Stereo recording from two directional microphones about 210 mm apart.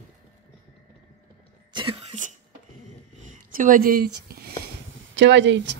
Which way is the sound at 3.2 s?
40° right (ahead or behind).